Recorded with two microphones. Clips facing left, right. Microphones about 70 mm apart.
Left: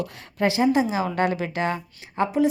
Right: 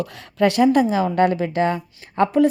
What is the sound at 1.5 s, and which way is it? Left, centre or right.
Speech, right.